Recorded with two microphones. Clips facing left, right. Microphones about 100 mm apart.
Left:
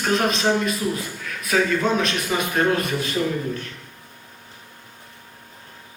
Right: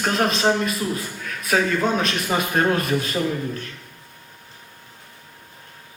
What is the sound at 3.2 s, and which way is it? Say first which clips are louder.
Speech: left 3 dB; 30° right (ahead or behind).